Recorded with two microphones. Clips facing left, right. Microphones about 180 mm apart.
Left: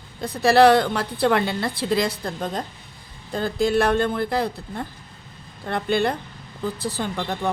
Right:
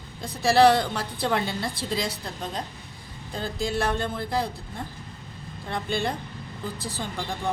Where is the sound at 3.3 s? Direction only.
60° left (ahead or behind).